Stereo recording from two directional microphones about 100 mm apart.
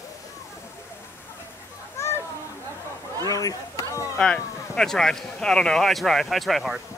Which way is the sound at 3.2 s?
35° left (ahead or behind).